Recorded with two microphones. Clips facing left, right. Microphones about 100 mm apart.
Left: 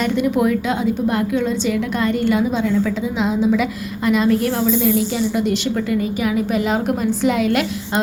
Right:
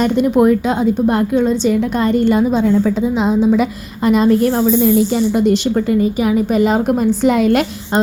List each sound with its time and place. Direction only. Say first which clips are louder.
0.0 s a woman's voice: right 5 dB; 40° right (ahead or behind)